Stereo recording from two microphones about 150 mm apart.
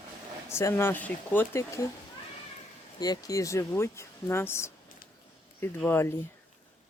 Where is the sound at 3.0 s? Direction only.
25° left (ahead or behind).